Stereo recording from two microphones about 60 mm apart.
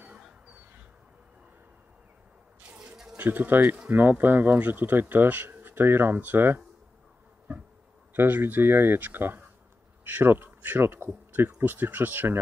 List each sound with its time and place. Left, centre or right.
0.0 s fowl: centre
2.6 s a sound: right
3.2 s speech: right
8.1 s speech: right